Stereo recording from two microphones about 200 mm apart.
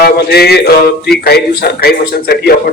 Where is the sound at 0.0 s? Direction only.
55° left (ahead or behind).